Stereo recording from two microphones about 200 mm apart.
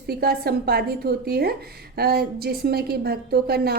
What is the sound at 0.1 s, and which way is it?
A woman's voice, 50° right (ahead or behind).